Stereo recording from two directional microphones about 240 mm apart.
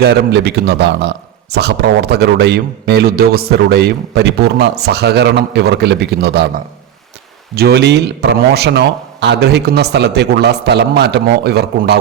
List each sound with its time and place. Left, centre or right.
0.0 s a man's voice: right